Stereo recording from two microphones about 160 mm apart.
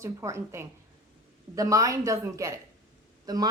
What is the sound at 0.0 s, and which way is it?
A woman's voice, 20° right (ahead or behind).